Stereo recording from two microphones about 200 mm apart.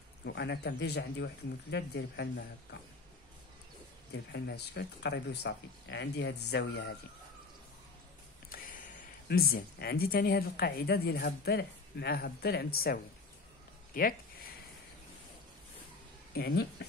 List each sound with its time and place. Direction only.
0.2 s speech: 60° left (ahead or behind)
4.1 s speech: 55° left (ahead or behind)
9.3 s a woman's voice: 50° left (ahead or behind)
16.3 s a woman's voice: 55° left (ahead or behind)